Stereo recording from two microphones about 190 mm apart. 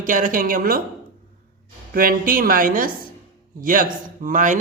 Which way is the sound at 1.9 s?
50° right (ahead or behind).